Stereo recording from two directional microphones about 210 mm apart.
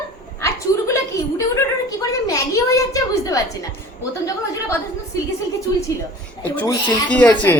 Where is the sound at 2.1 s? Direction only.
15° left (ahead or behind).